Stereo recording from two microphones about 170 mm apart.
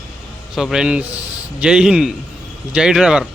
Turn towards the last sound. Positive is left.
turn(degrees=-5)  # may be behind; listen again after turning